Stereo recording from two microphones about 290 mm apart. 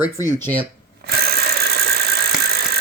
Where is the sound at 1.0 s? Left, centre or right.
Right.